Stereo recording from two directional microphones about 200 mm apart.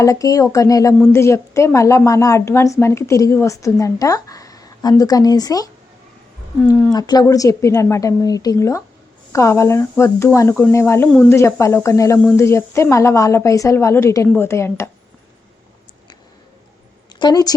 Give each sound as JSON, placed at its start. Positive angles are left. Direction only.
{"t": 0.0, "sound": "a woman's voice", "side_deg": 15}
{"t": 6.9, "sound": "a woman's voice", "side_deg": 20}
{"t": 17.2, "sound": "a woman's voice", "side_deg": 20}